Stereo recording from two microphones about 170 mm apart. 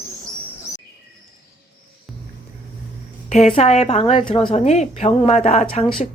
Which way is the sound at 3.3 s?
40° left (ahead or behind).